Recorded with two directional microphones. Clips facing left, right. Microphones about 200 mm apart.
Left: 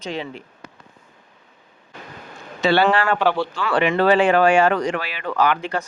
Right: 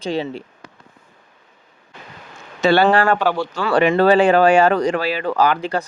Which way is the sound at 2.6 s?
45° right (ahead or behind).